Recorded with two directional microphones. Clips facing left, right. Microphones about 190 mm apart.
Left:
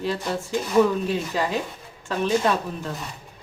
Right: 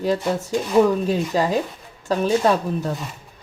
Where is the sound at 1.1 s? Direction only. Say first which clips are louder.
Right 5 dB; 40° right (ahead or behind).